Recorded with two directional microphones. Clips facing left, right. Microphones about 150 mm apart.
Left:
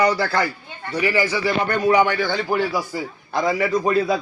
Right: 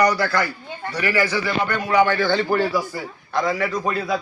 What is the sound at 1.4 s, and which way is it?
Speech, 45° left (ahead or behind).